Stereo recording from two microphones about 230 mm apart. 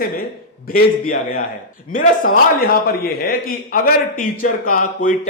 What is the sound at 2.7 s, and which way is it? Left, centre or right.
A man's voice, left.